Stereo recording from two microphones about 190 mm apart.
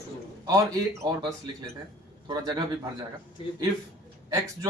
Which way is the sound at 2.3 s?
20° right (ahead or behind).